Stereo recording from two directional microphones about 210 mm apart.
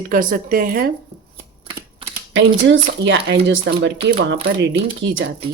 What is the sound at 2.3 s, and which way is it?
Speech, 65° right (ahead or behind).